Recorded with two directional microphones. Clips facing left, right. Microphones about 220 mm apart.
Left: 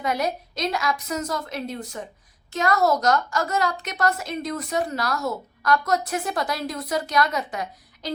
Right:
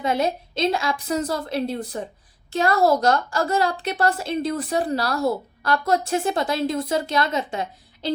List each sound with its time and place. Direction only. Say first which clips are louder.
0.0 s a woman's voice: right 3 dB; 25° right (ahead or behind)